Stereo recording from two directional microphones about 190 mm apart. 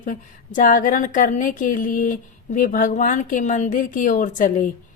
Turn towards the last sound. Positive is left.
turn(degrees=45)  # may be behind; listen again after turning